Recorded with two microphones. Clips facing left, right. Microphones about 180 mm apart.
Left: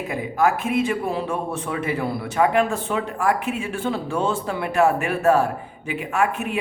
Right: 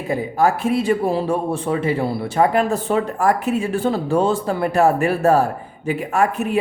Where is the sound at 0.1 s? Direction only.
35° right (ahead or behind).